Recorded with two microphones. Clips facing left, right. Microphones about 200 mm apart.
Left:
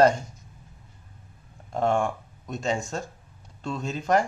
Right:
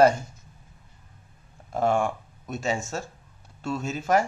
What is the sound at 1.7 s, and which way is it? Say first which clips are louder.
Speech: even; 5° right (ahead or behind).